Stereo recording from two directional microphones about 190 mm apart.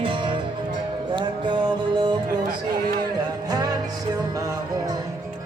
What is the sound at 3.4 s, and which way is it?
Music, 20° right (ahead or behind).